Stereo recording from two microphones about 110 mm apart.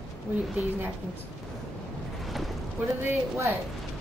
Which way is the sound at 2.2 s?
Centre (ahead or behind).